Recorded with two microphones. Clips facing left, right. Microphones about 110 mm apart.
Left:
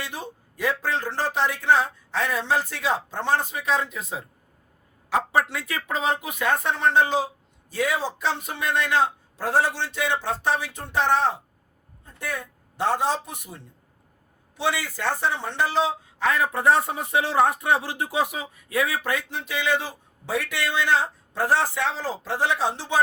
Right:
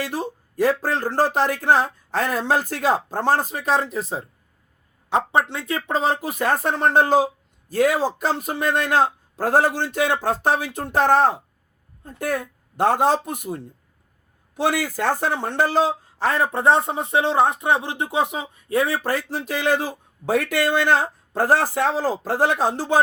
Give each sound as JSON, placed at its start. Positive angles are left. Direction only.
{"t": 0.0, "sound": "speech", "side_deg": -40}
{"t": 5.0, "sound": "speech", "side_deg": -25}